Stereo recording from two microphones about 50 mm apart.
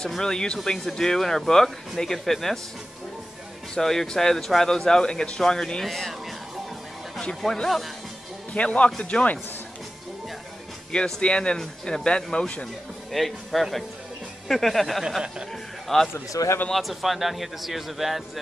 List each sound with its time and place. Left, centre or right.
0.2 s speech: centre
3.7 s speech: centre
7.2 s speech: centre
8.5 s speech: left
10.9 s speech: centre
13.1 s a man's voice: centre
15.0 s speech: centre
15.9 s a man's voice: centre